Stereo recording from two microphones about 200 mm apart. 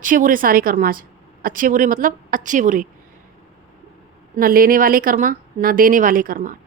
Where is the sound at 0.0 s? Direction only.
40° right (ahead or behind).